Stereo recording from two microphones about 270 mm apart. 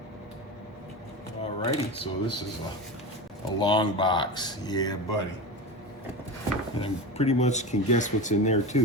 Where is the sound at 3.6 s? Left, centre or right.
Centre.